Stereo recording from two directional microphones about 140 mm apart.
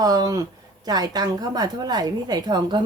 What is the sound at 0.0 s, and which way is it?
A woman's voice, 25° right (ahead or behind).